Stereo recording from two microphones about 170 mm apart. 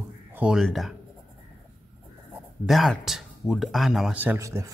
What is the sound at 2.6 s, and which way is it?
Speech, centre (ahead or behind).